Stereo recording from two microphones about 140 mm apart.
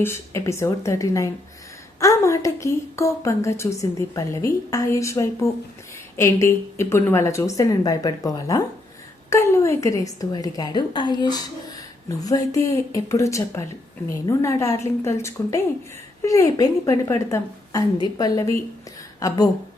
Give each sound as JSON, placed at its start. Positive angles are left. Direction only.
{"t": 0.0, "sound": "a woman's voice", "side_deg": 20}